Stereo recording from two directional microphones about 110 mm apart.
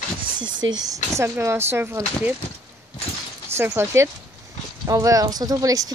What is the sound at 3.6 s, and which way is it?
Speech, 25° right (ahead or behind).